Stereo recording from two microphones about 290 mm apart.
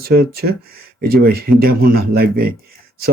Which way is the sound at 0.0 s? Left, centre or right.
Right.